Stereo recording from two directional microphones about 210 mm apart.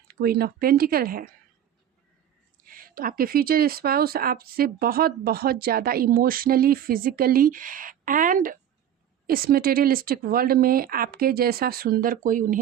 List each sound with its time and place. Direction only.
0.1 s speech: 45° right (ahead or behind)
2.6 s speech: 40° right (ahead or behind)